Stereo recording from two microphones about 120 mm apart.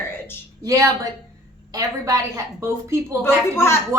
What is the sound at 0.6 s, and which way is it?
A woman's voice, 30° right (ahead or behind).